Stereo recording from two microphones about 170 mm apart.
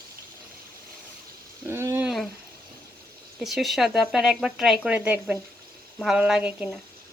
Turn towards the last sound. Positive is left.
turn(degrees=-5)  # may be behind; listen again after turning